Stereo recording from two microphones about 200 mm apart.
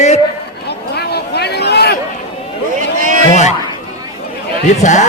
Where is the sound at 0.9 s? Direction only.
55° left (ahead or behind).